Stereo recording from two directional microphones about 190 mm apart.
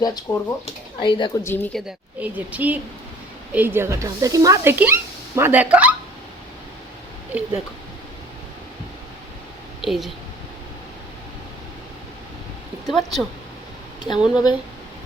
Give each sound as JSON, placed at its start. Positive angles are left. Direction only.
{"t": 0.0, "sound": "speech", "side_deg": 20}
{"t": 1.5, "sound": "speech", "side_deg": 10}
{"t": 2.1, "sound": "speech", "side_deg": -10}
{"t": 9.8, "sound": "a woman's voice", "side_deg": 0}
{"t": 12.9, "sound": "speech", "side_deg": 0}